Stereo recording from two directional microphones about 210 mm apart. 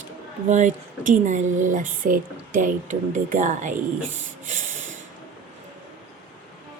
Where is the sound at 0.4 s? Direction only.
35° right (ahead or behind).